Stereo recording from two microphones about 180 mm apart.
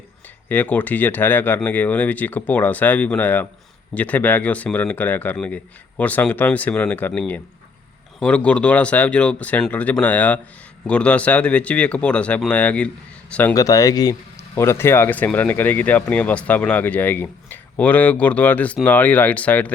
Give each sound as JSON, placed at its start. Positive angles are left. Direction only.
{"t": 0.4, "sound": "speech", "side_deg": 10}
{"t": 13.5, "sound": "speech", "side_deg": 20}